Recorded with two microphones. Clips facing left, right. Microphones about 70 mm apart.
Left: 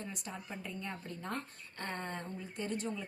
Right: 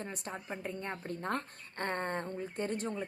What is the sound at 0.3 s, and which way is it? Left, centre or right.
Speech, right.